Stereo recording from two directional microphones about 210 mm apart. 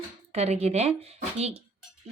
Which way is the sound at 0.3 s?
30° right (ahead or behind).